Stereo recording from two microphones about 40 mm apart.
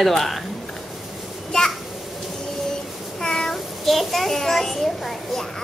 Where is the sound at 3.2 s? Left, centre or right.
Centre.